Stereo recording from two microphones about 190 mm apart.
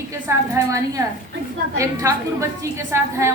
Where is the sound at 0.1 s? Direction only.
15° right (ahead or behind).